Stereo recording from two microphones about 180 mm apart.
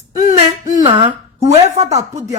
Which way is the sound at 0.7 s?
30° right (ahead or behind).